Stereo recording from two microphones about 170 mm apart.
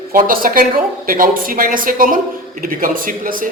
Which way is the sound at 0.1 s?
55° right (ahead or behind).